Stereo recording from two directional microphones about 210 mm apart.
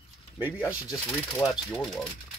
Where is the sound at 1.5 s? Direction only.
Centre (ahead or behind).